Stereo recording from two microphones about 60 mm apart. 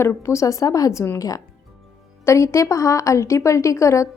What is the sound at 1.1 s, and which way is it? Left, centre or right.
Speech, left.